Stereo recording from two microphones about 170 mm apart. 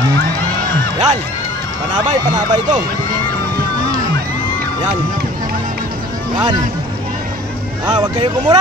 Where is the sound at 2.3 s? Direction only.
25° right (ahead or behind).